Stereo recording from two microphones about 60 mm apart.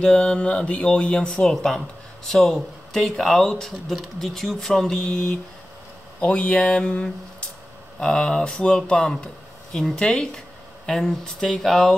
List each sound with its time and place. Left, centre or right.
0.0 s speech: centre
1.4 s speech: centre
6.2 s mantra: centre
8.0 s speech: centre